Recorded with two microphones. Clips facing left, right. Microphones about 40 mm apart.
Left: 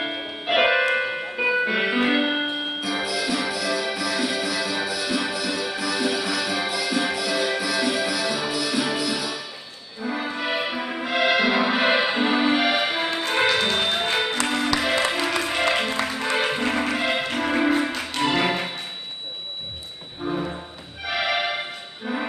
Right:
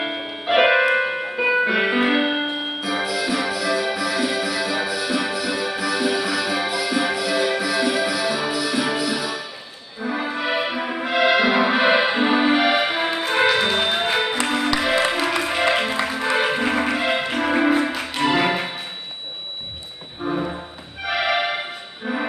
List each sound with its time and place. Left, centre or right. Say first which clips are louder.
0.0 s music: right 2 dB; centre
4.3 s music: right 2 dB; centre
4.6 s music: right 3 dB; centre
7.8 s music: right 3 dB; right
8.1 s music: right 3 dB; centre
20.2 s music: right 3 dB; centre